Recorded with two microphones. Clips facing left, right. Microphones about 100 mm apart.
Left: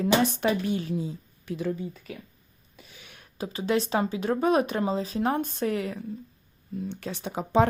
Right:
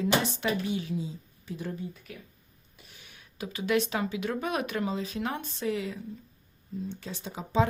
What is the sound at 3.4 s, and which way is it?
Speech, 35° left (ahead or behind).